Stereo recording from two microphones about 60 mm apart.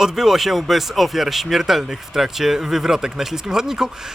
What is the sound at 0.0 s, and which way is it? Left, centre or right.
Speech, centre.